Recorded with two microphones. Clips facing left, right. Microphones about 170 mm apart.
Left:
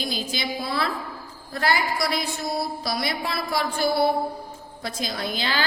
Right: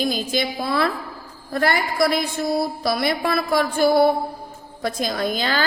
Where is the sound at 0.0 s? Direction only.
50° right (ahead or behind).